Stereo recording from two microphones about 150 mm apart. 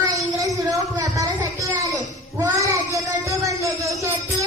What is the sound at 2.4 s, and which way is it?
Child singing, 20° right (ahead or behind).